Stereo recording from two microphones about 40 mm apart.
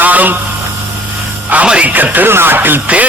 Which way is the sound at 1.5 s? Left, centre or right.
Right.